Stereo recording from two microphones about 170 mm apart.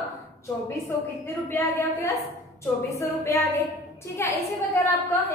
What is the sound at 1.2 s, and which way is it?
A woman's voice, 15° left (ahead or behind).